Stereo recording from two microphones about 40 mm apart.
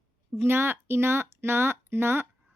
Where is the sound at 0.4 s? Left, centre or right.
Right.